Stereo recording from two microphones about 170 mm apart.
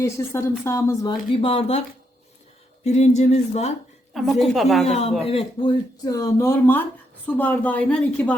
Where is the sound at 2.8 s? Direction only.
40° left (ahead or behind).